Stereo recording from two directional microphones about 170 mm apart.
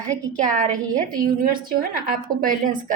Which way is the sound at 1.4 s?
55° right (ahead or behind).